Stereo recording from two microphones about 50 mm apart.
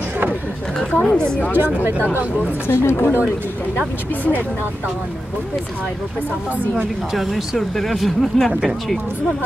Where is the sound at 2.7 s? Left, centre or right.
Left.